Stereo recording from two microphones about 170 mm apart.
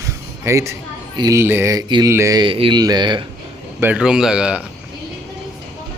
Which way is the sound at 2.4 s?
30° right (ahead or behind).